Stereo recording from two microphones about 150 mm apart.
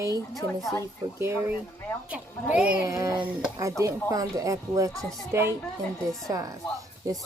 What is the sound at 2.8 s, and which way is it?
A woman's voice, 20° right (ahead or behind).